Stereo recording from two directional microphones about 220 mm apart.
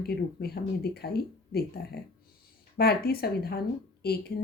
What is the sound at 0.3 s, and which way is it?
A woman's voice, 45° left (ahead or behind).